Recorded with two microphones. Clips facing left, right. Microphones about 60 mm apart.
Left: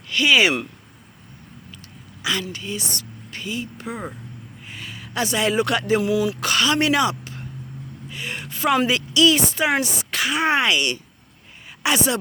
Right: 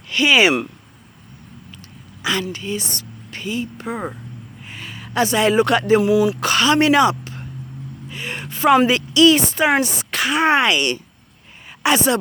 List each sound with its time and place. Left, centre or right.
0.1 s speech: right
2.2 s a woman's voice: right
6.0 s a woman's voice: right